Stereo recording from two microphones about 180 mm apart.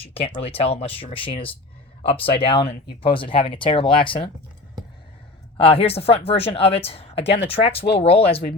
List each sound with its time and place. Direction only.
0.0 s a woman's voice: 35° left (ahead or behind)
5.5 s a woman's voice: 30° left (ahead or behind)